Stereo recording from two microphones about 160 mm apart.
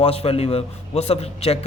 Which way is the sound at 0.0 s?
40° left (ahead or behind).